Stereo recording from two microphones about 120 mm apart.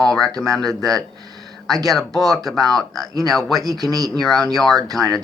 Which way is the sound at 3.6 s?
30° right (ahead or behind).